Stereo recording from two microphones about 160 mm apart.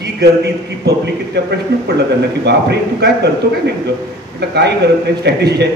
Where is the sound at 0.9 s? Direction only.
90° right.